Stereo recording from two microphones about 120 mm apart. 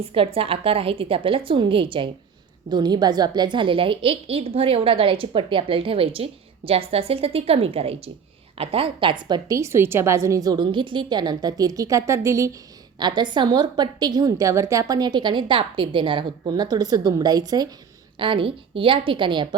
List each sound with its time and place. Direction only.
0.0 s a woman's voice: 50° right (ahead or behind); by 12.5 s 25° right (ahead or behind)
13.0 s a woman's voice: 40° right (ahead or behind)
18.2 s a woman's voice: 45° right (ahead or behind)